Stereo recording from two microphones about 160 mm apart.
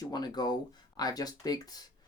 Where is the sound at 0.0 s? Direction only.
25° left (ahead or behind).